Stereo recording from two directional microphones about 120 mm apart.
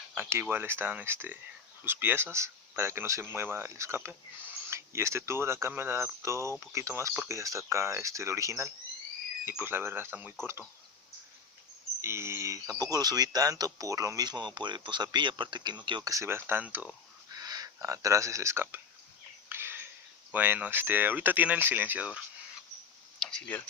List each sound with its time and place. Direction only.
0.1 s speech: 20° right (ahead or behind)
12.0 s speech: 20° right (ahead or behind)
17.3 s speech: 30° right (ahead or behind)
19.5 s a sound: 20° right (ahead or behind)
20.3 s speech: 15° right (ahead or behind)
23.2 s speech: 10° left (ahead or behind)